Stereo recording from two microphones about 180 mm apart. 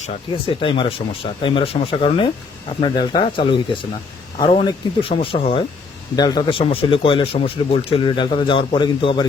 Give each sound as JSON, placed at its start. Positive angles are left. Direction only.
{"t": 0.0, "sound": "speech", "side_deg": 30}